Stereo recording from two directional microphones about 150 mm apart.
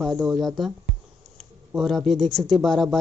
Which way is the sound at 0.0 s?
Centre (ahead or behind).